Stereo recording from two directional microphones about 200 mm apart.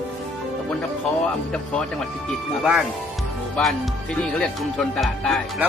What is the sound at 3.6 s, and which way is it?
Speech, 5° left (ahead or behind).